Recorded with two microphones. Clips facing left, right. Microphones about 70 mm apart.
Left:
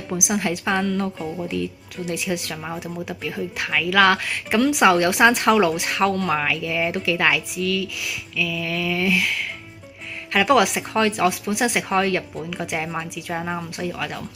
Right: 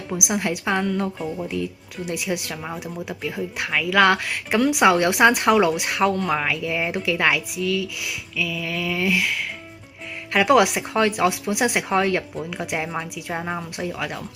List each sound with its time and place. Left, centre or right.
0.3 s speech: centre
1.2 s speech: centre
1.5 s speech: centre